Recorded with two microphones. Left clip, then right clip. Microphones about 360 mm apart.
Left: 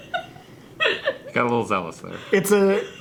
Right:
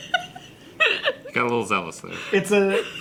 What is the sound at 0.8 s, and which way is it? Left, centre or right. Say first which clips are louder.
Hiccup: right 2 dB; left.